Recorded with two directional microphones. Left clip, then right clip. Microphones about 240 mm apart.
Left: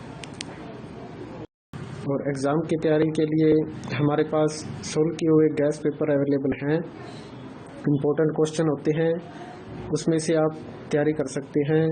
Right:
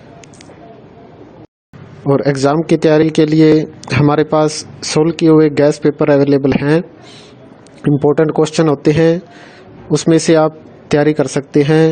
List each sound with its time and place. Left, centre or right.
2.0 s a man's voice: right
7.9 s a man's voice: right